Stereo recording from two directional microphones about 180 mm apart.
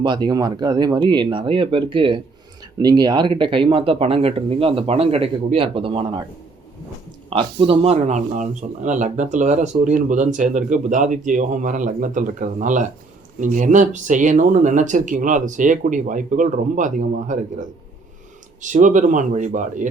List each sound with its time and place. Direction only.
0.0 s speech: 25° right (ahead or behind)
7.3 s speech: 30° right (ahead or behind)